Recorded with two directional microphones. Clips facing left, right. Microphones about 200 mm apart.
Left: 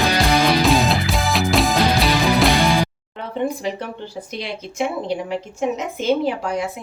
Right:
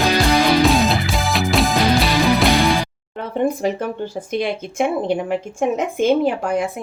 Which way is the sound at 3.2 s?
50° right (ahead or behind).